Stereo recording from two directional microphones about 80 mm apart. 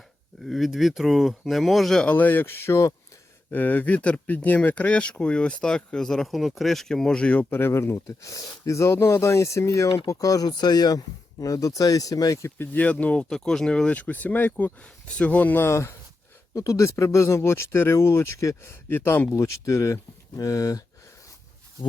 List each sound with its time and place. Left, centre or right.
0.4 s speech: centre
2.0 s speech: left
3.5 s speech: left
12.5 s speech: centre
15.7 s speech: left